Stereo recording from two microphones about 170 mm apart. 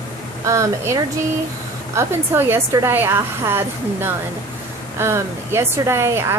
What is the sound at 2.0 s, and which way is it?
A woman's voice, 15° right (ahead or behind).